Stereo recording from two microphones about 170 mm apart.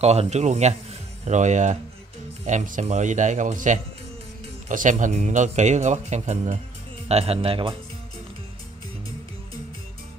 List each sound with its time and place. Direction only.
0.0 s speech: 40° right (ahead or behind)